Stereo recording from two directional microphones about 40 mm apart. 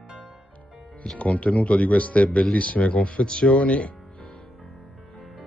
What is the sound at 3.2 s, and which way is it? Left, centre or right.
Speech, left.